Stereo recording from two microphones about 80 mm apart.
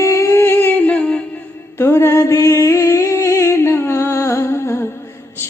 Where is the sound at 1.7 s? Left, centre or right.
Left.